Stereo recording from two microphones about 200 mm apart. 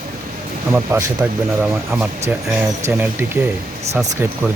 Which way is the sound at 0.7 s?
10° right (ahead or behind).